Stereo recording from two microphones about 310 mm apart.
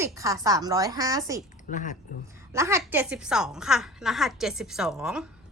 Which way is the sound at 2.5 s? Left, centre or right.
Centre.